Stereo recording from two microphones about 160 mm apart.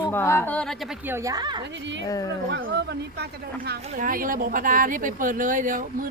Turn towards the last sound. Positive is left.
turn(degrees=-55)  # may be behind; listen again after turning